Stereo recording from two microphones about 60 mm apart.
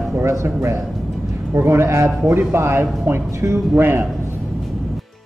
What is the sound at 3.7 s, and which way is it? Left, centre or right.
Speech, right.